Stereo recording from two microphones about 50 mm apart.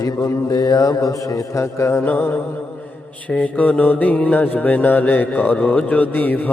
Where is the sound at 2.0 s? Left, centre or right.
Left.